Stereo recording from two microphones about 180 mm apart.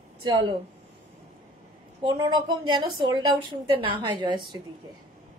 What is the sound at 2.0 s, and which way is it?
A woman's voice, 25° right (ahead or behind).